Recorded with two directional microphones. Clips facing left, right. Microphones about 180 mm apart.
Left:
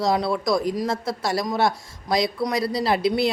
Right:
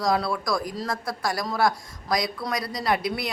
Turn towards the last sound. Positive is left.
turn(degrees=25)  # may be behind; listen again after turning